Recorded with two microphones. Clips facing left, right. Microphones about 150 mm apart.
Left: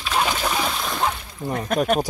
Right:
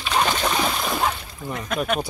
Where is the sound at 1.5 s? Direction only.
45° left (ahead or behind).